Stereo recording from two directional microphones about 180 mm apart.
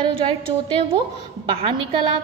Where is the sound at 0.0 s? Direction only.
30° right (ahead or behind).